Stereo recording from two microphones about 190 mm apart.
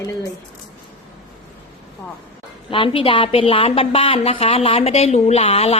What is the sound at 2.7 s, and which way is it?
A woman's voice, 25° left (ahead or behind).